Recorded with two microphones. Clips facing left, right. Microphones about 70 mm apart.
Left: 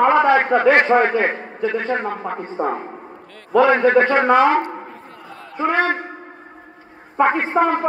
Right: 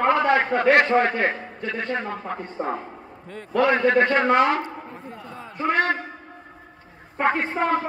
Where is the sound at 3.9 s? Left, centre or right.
Left.